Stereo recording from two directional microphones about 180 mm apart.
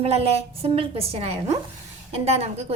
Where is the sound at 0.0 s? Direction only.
35° right (ahead or behind).